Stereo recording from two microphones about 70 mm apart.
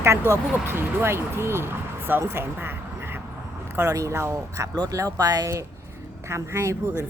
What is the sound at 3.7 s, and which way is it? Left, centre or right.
Speech, right.